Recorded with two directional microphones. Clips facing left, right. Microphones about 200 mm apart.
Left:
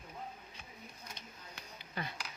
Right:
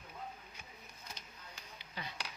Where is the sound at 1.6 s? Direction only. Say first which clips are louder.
Left 5 dB; 55° left (ahead or behind).